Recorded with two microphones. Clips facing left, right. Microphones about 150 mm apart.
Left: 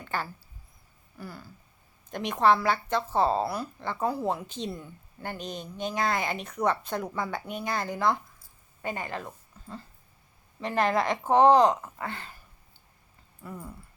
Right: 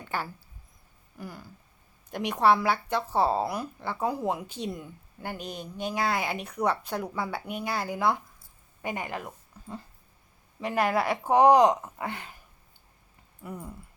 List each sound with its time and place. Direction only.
0.0 s a sound: 10° right (ahead or behind)
1.2 s speech: 15° right (ahead or behind)
13.4 s speech: 15° right (ahead or behind)